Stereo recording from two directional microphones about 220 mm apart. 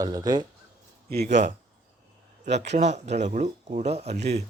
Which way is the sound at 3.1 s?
30° right (ahead or behind).